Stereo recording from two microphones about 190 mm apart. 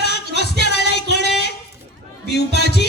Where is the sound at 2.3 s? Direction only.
60° left (ahead or behind).